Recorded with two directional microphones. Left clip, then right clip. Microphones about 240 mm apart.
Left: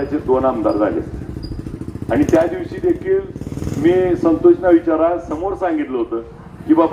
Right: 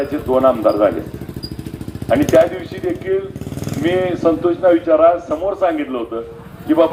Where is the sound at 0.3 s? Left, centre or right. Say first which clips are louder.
Right 3 dB; right.